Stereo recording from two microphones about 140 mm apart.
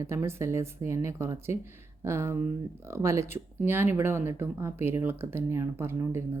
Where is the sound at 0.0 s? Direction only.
20° right (ahead or behind).